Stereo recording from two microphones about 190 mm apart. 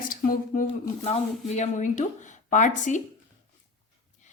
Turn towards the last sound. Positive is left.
turn(degrees=40)  # may be behind; listen again after turning